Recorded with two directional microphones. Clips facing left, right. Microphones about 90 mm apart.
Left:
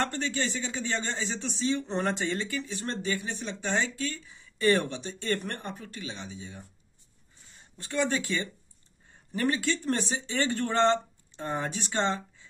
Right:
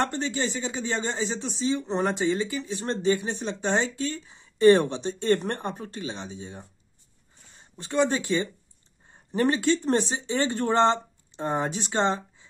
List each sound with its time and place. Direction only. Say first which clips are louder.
0.0 s speech: right 3 dB; 20° right (ahead or behind)
2.8 s speech: right 10 dB; 25° right (ahead or behind)
7.7 s speech: right 4 dB; 25° right (ahead or behind)